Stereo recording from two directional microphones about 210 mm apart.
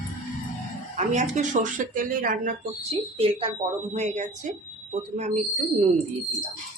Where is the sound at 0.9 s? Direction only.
35° right (ahead or behind).